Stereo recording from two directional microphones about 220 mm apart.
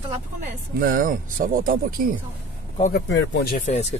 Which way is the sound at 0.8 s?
40° right (ahead or behind).